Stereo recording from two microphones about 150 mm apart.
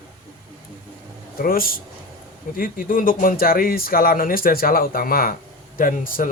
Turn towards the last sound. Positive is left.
turn(degrees=70)  # may be behind; listen again after turning